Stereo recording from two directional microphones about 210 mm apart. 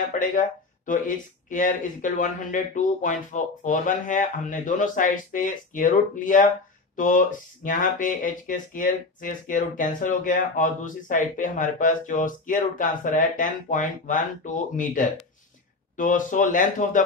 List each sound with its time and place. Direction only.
0.2 s speech: 40° left (ahead or behind)